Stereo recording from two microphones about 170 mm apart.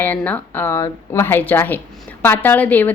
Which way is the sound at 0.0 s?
10° left (ahead or behind).